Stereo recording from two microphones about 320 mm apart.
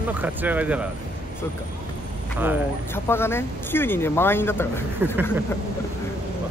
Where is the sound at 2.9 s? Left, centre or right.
Centre.